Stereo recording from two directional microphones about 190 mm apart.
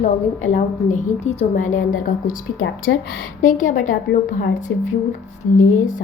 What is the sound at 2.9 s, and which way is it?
Speech, 75° left (ahead or behind).